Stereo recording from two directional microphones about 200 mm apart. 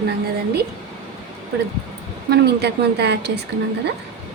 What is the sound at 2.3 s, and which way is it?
A woman's voice, 55° right (ahead or behind).